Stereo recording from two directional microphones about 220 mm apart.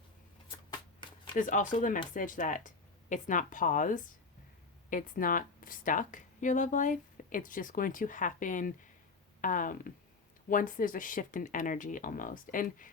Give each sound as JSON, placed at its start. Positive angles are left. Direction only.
{"t": 1.0, "sound": "shuffling cards", "side_deg": 20}
{"t": 1.4, "sound": "speech", "side_deg": 35}